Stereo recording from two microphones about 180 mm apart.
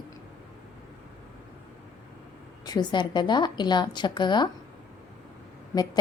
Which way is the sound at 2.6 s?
20° left (ahead or behind).